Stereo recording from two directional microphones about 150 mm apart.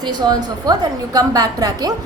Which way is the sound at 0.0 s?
30° right (ahead or behind).